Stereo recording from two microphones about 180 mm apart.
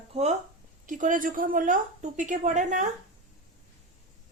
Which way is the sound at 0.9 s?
45° right (ahead or behind).